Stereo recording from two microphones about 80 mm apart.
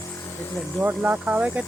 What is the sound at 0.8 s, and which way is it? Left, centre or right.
Speech, right.